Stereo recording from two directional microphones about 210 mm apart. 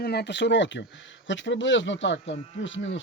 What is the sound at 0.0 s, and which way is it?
Speech, 50° left (ahead or behind).